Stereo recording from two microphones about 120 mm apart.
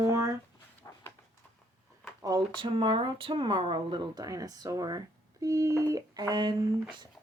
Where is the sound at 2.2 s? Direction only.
35° right (ahead or behind).